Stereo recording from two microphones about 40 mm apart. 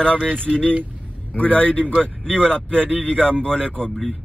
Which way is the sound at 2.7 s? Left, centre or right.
Right.